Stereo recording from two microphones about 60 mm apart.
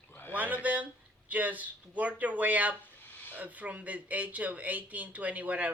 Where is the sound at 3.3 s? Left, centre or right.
Right.